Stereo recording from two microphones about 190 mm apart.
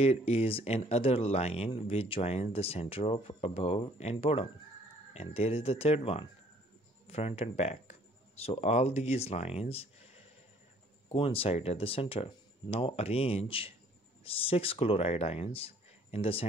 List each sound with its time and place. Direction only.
0.0 s speech: 35° left (ahead or behind)